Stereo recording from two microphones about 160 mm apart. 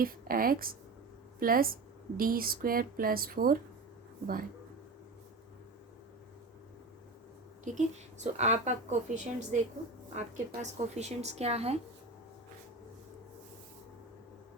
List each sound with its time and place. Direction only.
0.0 s a woman's voice: 65° right (ahead or behind)
7.6 s a woman's voice: 45° right (ahead or behind)